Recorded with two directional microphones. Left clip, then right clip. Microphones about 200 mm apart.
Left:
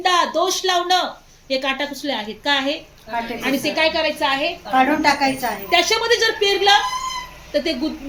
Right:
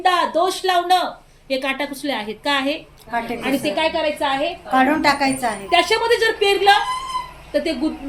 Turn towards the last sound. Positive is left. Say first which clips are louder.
# even
turn(degrees=0)  # may be behind; listen again after turning